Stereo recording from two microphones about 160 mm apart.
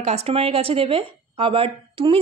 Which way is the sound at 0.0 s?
40° right (ahead or behind).